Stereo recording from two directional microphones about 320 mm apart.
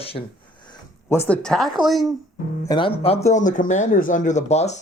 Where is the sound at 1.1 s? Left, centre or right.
Centre.